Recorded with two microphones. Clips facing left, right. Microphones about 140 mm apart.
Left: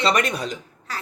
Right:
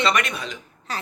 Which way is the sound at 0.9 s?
20° right (ahead or behind).